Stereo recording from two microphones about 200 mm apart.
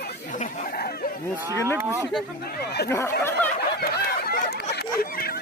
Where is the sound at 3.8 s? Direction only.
50° left (ahead or behind).